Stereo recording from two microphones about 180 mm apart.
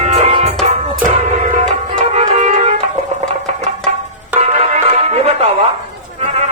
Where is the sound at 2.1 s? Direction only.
35° right (ahead or behind).